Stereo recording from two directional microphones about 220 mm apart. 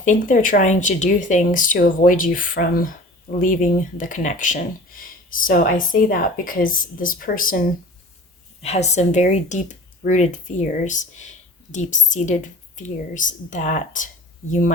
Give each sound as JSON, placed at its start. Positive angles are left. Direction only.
{"t": 0.0, "sound": "speech", "side_deg": 35}
{"t": 8.6, "sound": "speech", "side_deg": 30}